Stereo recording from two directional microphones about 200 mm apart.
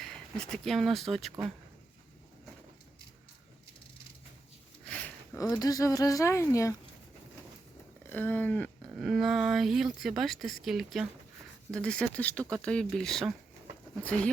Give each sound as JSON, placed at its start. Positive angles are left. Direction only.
{"t": 0.5, "sound": "speech", "side_deg": 0}
{"t": 4.9, "sound": "speech", "side_deg": 10}
{"t": 8.1, "sound": "speech", "side_deg": 10}